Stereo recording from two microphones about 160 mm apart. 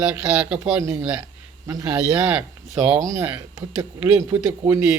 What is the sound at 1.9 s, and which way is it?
A man's voice, 10° right (ahead or behind).